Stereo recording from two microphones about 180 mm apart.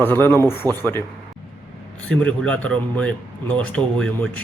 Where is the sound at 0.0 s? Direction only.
10° left (ahead or behind).